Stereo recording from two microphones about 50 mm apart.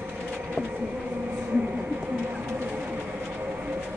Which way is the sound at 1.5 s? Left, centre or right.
Right.